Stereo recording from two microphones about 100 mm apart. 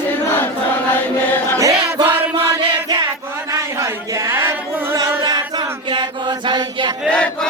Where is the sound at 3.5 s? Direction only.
35° right (ahead or behind).